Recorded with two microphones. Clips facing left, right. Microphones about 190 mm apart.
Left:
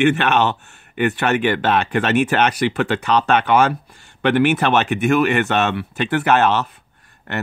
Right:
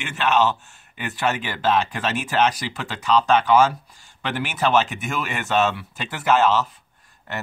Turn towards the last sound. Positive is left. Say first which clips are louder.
# left 3 dB
turn(degrees=65)  # may be behind; listen again after turning